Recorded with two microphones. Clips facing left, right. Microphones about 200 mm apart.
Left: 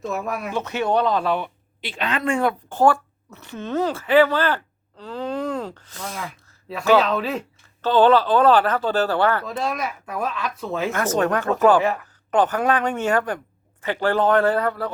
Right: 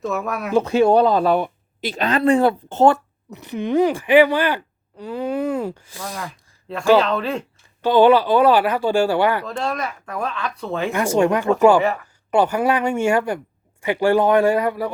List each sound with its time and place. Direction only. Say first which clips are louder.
0.0 s speech: right 2 dB; centre (ahead or behind)
0.5 s speech: right 8 dB; 30° right (ahead or behind); by 6.1 s 10° right (ahead or behind)
6.7 s speech: right 2 dB; centre (ahead or behind)
7.8 s speech: right 2 dB; 15° right (ahead or behind)
9.5 s speech: right 1 dB; 5° left (ahead or behind)
10.9 s speech: right 5 dB; 10° right (ahead or behind)
11.8 s speech: right 2 dB; centre (ahead or behind)
12.3 s speech: right 2 dB; 10° right (ahead or behind)